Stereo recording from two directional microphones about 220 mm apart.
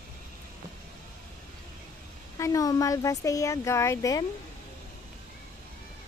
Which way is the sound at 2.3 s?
15° left (ahead or behind).